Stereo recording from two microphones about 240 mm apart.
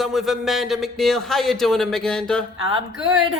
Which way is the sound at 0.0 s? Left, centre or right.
Centre.